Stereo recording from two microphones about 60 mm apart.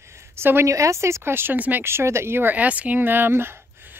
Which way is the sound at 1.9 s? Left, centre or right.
Right.